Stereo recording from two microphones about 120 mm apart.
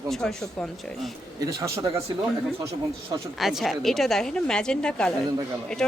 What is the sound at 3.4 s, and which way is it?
Speech, centre (ahead or behind).